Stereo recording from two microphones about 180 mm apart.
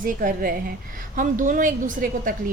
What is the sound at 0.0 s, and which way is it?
A woman's voice, 50° right (ahead or behind).